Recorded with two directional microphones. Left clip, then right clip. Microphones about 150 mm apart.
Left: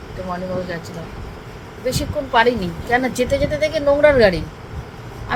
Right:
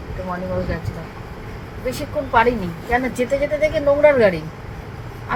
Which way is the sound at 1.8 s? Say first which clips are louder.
Left 1 dB; 20° left (ahead or behind).